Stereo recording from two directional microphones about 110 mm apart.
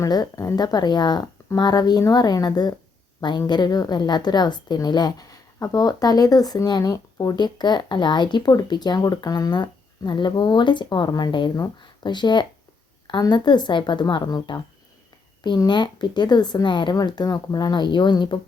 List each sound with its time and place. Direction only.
0.0 s a woman's voice: 35° left (ahead or behind)